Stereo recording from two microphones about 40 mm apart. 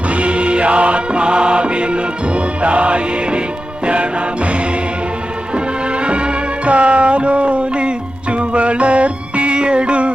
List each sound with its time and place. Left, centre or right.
0.1 s music: right
5.5 s music: right